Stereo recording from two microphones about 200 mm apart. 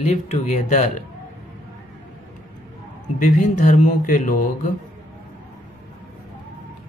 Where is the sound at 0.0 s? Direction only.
35° left (ahead or behind).